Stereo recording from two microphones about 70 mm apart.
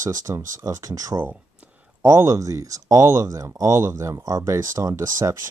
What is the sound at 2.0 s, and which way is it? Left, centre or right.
Speech, right.